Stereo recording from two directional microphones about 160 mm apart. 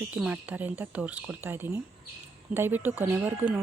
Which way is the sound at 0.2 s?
10° right (ahead or behind).